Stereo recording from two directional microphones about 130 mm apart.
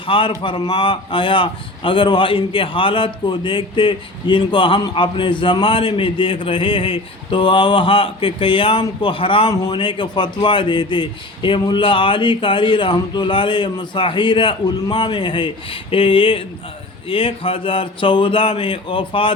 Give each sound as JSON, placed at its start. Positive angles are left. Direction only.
{"t": 0.0, "sound": "a man's voice", "side_deg": 40}